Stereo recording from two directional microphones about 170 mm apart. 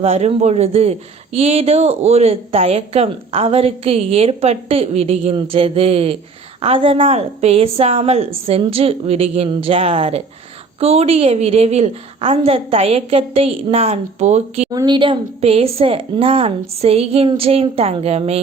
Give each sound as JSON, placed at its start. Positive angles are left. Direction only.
{"t": 0.0, "sound": "a man's voice", "side_deg": -35}
{"t": 14.7, "sound": "a man's voice", "side_deg": -25}